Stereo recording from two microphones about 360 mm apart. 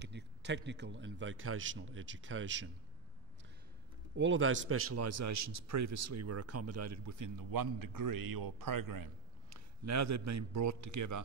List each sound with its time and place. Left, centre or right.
0.0 s a man's voice: right
4.2 s a man's voice: right
9.5 s a man's voice: right